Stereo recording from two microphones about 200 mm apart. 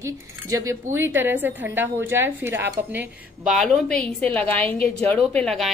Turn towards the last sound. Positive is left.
turn(degrees=5)  # may be behind; listen again after turning